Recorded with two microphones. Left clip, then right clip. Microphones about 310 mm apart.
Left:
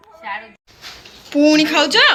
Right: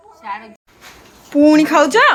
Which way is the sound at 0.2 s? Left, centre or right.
Centre.